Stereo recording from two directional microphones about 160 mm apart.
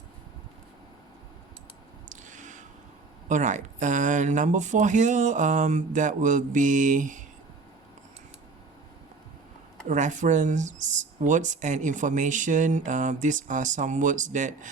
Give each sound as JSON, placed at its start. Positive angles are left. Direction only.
{"t": 2.0, "sound": "a sound", "side_deg": -50}
{"t": 3.2, "sound": "speech", "side_deg": -50}
{"t": 9.9, "sound": "speech", "side_deg": -50}